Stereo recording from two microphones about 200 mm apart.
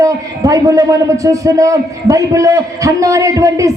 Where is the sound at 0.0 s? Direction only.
15° right (ahead or behind).